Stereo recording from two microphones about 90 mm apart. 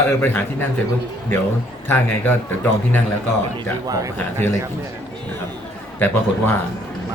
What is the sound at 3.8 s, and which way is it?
Speech, 40° right (ahead or behind).